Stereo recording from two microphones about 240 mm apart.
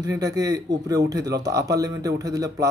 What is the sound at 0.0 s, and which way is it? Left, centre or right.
A man's voice, centre.